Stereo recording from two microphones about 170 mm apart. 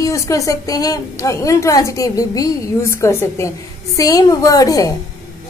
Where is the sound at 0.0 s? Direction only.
20° left (ahead or behind).